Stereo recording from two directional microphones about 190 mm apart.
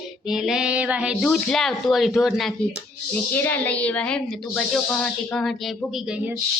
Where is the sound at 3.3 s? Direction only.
10° left (ahead or behind).